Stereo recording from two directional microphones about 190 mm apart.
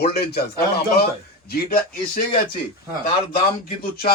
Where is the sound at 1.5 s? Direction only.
55° left (ahead or behind).